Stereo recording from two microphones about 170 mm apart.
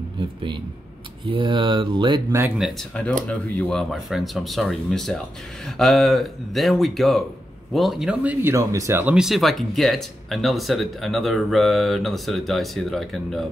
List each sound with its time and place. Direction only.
1.2 s speech: 30° right (ahead or behind)
2.6 s speech: 5° left (ahead or behind)